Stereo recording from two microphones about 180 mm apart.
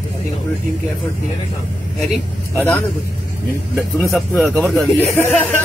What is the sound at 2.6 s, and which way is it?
Speech, 10° left (ahead or behind).